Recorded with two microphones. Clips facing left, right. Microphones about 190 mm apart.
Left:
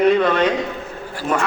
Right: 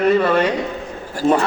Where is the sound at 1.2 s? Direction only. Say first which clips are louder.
Right 6 dB; 90° right.